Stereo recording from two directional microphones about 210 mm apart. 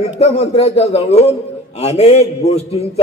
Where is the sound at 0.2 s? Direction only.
30° left (ahead or behind).